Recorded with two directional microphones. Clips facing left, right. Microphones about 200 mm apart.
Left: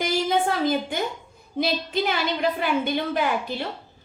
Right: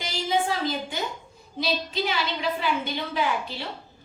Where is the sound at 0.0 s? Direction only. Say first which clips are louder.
Left 4 dB; 55° left (ahead or behind).